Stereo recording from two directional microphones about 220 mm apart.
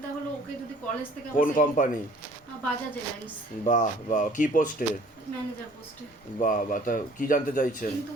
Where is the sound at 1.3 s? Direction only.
35° left (ahead or behind).